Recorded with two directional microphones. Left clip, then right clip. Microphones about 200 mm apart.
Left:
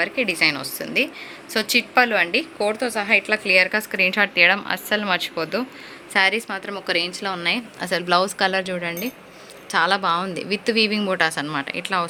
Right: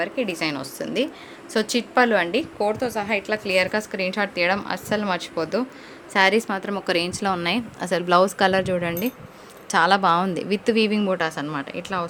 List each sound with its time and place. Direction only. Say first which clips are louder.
0.0 s a woman's voice: left 5 dB; 5° right (ahead or behind)